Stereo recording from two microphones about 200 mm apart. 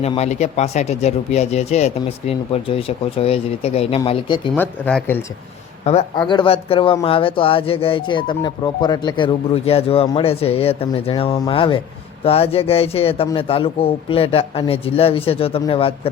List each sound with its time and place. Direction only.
0.0 s speech: 30° left (ahead or behind)
4.5 s speech: 5° left (ahead or behind)
5.8 s a man's voice: 35° left (ahead or behind)